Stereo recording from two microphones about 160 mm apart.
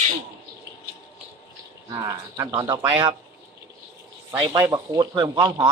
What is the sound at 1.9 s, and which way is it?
Speech, 20° right (ahead or behind).